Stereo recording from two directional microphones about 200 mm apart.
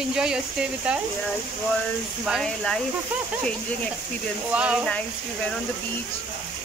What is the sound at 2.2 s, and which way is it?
Speech, centre (ahead or behind).